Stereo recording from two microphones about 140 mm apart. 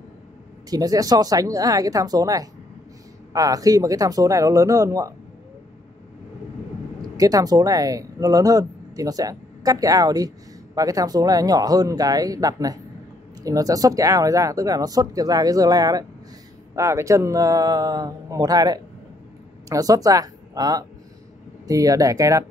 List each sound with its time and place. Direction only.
0.7 s speech: 25° right (ahead or behind)
7.2 s speech: 25° right (ahead or behind)